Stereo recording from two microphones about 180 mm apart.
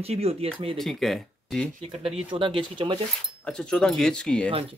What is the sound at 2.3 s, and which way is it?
Speech, 25° right (ahead or behind).